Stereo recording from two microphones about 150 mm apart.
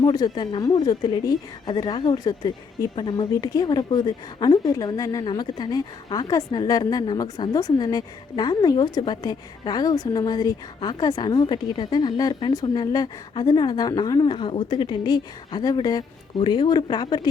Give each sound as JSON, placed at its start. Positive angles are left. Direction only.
{"t": 0.0, "sound": "a woman's voice", "side_deg": 30}